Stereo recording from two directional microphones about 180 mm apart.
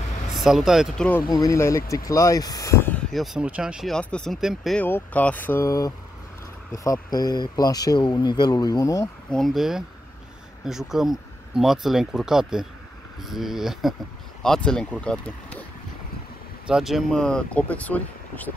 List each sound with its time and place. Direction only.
0.3 s speech: centre (ahead or behind)
1.2 s speech: 20° left (ahead or behind)
3.1 s speech: centre (ahead or behind)
4.8 s speech: 10° left (ahead or behind)
9.3 s speech: centre (ahead or behind)
16.6 s speech: centre (ahead or behind)